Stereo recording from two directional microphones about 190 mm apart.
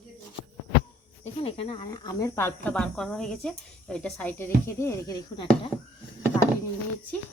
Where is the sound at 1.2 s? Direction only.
30° left (ahead or behind); by 5.5 s 15° left (ahead or behind).